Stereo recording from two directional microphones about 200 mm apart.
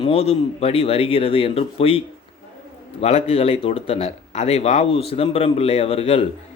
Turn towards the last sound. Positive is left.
turn(degrees=30)  # may be behind; listen again after turning